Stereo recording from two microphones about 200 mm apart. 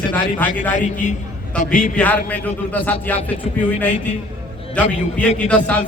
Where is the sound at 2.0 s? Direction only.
10° left (ahead or behind).